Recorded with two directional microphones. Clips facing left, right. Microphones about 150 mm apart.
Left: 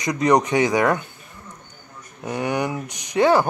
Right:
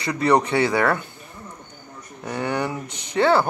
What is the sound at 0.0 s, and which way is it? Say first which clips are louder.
Speech: left 1 dB; 15° left (ahead or behind).